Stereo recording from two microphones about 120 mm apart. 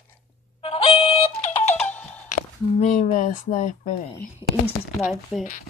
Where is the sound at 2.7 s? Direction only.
75° left (ahead or behind).